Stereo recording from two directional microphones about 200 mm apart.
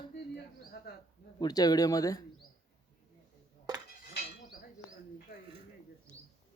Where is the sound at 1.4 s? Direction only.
20° left (ahead or behind).